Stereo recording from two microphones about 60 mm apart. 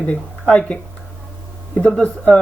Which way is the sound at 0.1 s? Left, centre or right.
Left.